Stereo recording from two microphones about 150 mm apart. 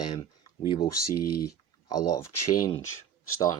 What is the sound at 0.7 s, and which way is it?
Speech, 25° left (ahead or behind).